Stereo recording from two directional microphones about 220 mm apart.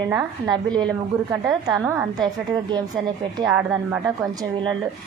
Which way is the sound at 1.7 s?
15° right (ahead or behind).